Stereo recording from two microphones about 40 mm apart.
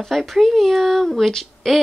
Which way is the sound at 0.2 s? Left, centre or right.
Centre.